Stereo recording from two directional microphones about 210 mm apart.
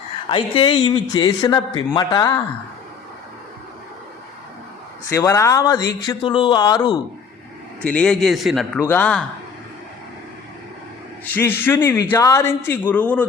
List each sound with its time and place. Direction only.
0.3 s speech: 25° left (ahead or behind)
5.0 s speech: 15° left (ahead or behind)
7.8 s a man's voice: 5° left (ahead or behind)
11.3 s speech: 10° left (ahead or behind)